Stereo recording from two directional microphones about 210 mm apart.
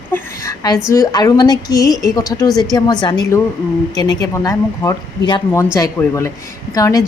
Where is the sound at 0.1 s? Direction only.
15° left (ahead or behind).